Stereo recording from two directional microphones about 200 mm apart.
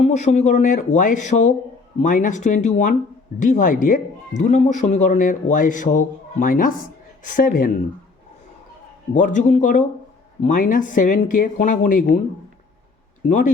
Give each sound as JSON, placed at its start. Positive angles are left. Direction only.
{"t": 0.0, "sound": "speech", "side_deg": 35}
{"t": 9.1, "sound": "speech", "side_deg": 40}
{"t": 13.2, "sound": "speech", "side_deg": 40}